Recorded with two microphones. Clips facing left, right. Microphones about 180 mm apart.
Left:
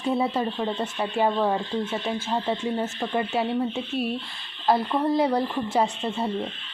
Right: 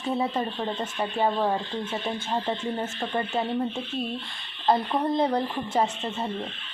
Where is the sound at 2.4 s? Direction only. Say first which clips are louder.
Left 3 dB; 10° left (ahead or behind).